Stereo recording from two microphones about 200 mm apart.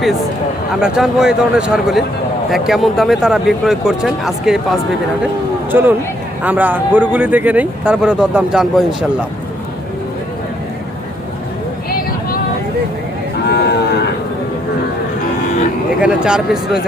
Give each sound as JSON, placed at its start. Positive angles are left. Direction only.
{"t": 0.8, "sound": "speech", "side_deg": -5}
{"t": 5.7, "sound": "speech", "side_deg": -10}
{"t": 13.5, "sound": "cattle", "side_deg": 55}
{"t": 16.0, "sound": "speech", "side_deg": -5}